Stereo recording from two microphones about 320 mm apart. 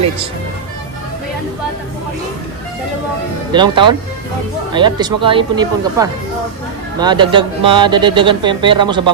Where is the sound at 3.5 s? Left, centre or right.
Centre.